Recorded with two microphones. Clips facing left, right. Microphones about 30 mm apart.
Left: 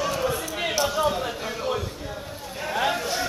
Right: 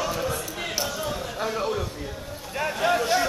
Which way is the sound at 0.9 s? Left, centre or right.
Left.